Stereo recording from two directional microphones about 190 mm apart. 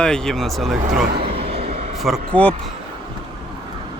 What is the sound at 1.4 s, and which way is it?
Vehicle, 30° right (ahead or behind).